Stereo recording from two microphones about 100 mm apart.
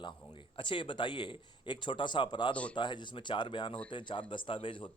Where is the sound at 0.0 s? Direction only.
55° left (ahead or behind).